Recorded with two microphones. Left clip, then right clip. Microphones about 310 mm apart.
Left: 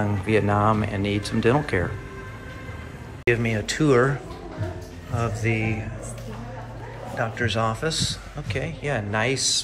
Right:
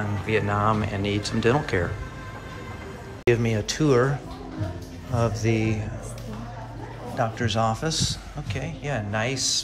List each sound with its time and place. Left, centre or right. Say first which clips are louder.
0.0 s a man's voice: left 3 dB; centre
3.3 s a man's voice: even; centre
7.2 s a man's voice: even; centre